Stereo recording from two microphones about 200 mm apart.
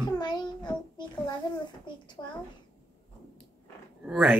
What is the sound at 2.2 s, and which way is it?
Speech, 15° left (ahead or behind).